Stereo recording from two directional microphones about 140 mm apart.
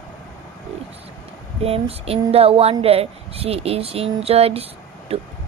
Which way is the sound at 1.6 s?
45° right (ahead or behind).